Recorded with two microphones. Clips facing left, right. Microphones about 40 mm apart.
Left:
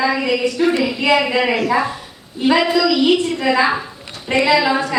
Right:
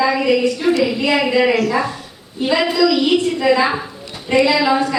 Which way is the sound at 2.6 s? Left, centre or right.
Centre.